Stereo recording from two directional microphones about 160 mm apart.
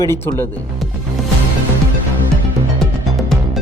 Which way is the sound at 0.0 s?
20° left (ahead or behind).